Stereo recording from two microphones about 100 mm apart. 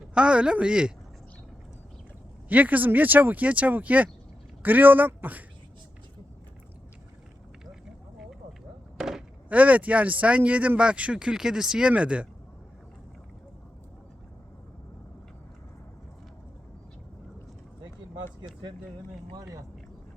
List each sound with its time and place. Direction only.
0.1 s speech: 10° right (ahead or behind)
2.5 s speech: 15° right (ahead or behind)
9.0 s speech: 5° right (ahead or behind)
19.3 s speech: 40° right (ahead or behind)